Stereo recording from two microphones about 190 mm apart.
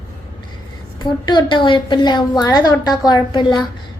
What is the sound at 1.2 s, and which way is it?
A woman's voice, 25° left (ahead or behind).